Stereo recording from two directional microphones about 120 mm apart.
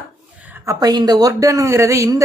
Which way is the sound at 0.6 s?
30° right (ahead or behind).